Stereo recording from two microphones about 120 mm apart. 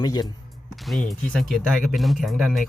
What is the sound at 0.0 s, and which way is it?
Speech, 35° left (ahead or behind).